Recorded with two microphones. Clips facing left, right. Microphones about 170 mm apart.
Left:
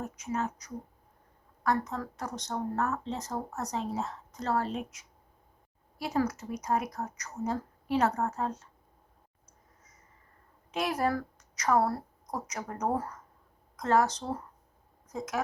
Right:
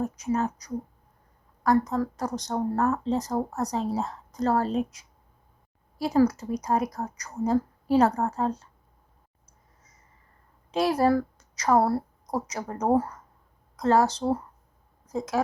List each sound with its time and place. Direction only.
0.0 s speech: 35° right (ahead or behind)
10.7 s a woman's voice: 30° right (ahead or behind)